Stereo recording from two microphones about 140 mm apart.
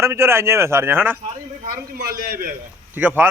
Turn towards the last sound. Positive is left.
turn(degrees=-15)  # may be behind; listen again after turning